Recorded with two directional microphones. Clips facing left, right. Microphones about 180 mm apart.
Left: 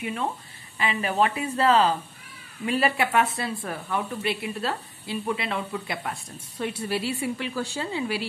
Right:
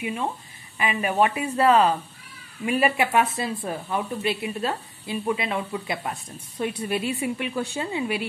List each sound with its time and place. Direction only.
0.0 s speech: 10° right (ahead or behind)
2.6 s speech: 15° right (ahead or behind)